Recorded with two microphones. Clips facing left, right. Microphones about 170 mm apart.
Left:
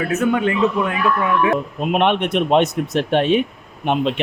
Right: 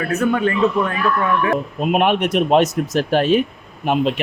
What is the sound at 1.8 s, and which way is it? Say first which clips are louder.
Speech: right 1 dB; 5° right (ahead or behind).